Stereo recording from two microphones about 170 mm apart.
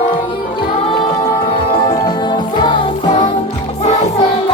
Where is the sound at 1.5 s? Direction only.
30° left (ahead or behind).